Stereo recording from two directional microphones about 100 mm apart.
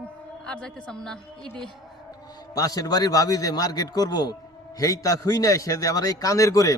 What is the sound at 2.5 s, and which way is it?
A man's voice, 40° left (ahead or behind).